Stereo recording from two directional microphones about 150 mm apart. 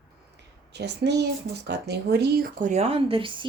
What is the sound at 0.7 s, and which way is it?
Speech, 90° right.